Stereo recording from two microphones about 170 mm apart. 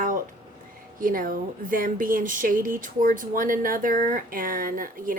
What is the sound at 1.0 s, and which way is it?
Speech, 55° right (ahead or behind).